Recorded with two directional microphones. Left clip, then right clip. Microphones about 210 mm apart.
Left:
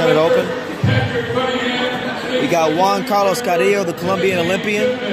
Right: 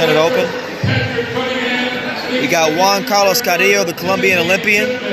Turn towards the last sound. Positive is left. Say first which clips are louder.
# right 5 dB
turn(degrees=5)  # may be behind; listen again after turning